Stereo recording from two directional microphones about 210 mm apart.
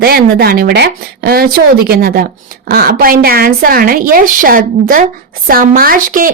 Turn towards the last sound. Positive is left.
turn(degrees=-40)  # may be behind; listen again after turning